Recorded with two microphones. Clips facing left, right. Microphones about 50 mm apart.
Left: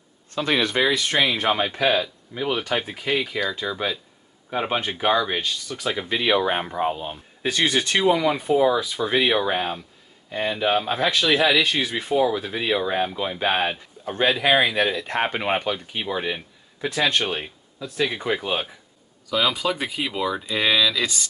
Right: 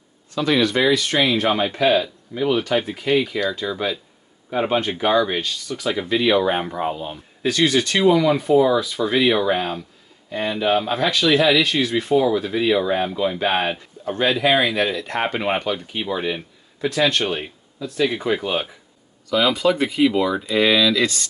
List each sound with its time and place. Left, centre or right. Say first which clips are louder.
0.3 s speech: right 3 dB; left
0.7 s speech: right 3 dB; centre
10.3 s speech: right 2 dB; centre